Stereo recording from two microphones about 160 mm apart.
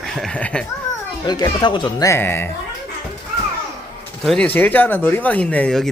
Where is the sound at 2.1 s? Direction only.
15° left (ahead or behind).